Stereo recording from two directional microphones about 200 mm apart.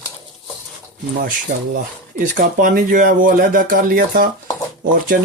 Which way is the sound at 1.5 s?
40° right (ahead or behind).